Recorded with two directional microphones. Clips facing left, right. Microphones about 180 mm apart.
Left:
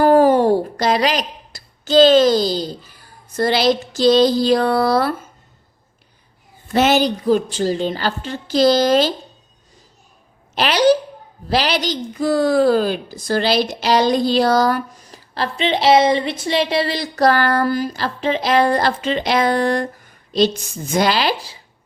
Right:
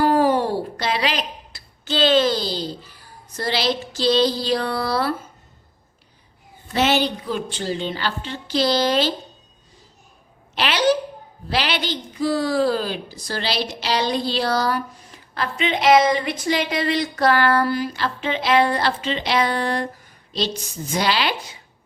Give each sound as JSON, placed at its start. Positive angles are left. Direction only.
{"t": 0.0, "sound": "a sound", "side_deg": 45}
{"t": 3.3, "sound": "a woman's voice", "side_deg": 50}
{"t": 6.7, "sound": "a woman's voice", "side_deg": 45}
{"t": 10.5, "sound": "a woman's voice", "side_deg": 40}
{"t": 15.4, "sound": "a woman's voice", "side_deg": 30}
{"t": 20.9, "sound": "a woman's voice", "side_deg": 45}